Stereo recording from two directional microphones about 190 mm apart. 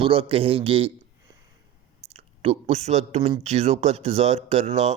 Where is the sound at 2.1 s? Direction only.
30° right (ahead or behind).